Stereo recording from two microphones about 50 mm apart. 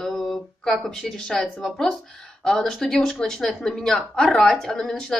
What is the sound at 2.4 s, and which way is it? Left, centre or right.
Speech, centre.